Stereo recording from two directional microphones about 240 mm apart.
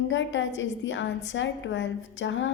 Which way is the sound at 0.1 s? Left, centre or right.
Left.